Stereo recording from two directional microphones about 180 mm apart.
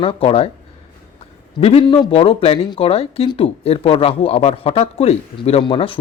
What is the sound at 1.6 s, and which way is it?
Speech, 35° left (ahead or behind).